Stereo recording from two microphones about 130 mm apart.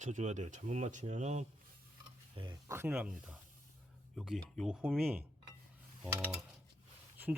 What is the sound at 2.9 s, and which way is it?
Speech, 10° right (ahead or behind).